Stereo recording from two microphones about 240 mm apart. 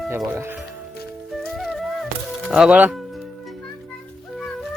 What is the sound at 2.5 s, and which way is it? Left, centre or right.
Speech, centre.